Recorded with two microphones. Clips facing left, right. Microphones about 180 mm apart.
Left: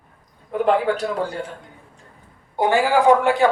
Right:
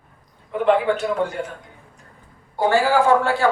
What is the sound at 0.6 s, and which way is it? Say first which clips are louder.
Speech: right 1 dB; 35° left (ahead or behind).